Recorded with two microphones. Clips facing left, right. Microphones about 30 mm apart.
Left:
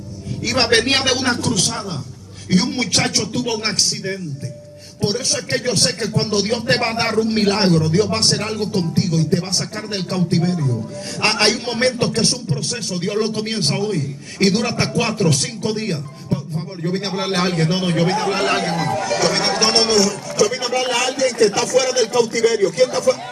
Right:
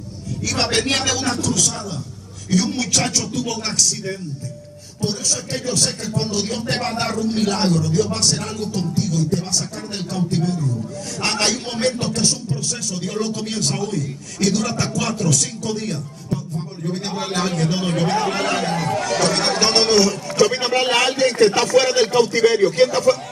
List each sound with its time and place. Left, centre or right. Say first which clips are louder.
0.5 s speech: left 4 dB; left
5.0 s speech: left 3 dB; left
19.0 s speech: left 1 dB; centre
20.3 s speech: right 1 dB; right